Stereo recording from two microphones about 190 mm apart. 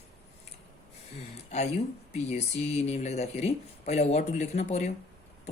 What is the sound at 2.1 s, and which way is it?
A woman's voice, 35° left (ahead or behind).